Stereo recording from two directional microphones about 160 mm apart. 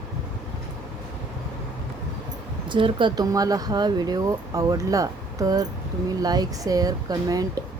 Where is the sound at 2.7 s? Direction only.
30° right (ahead or behind).